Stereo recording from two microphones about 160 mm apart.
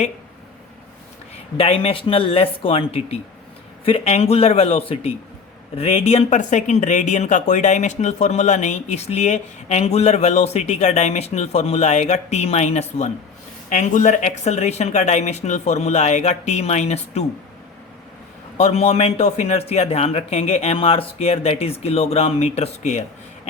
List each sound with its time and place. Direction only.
1.5 s a man's voice: 40° left (ahead or behind)
18.5 s a man's voice: 40° left (ahead or behind)